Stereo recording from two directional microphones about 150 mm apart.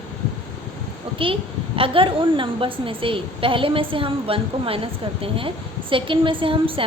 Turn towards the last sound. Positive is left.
turn(degrees=-35)  # may be behind; listen again after turning